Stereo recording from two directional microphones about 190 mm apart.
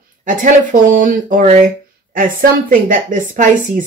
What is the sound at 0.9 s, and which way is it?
Speech, 40° right (ahead or behind).